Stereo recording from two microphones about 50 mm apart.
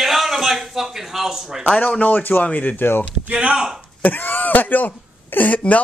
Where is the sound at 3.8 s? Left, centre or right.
Left.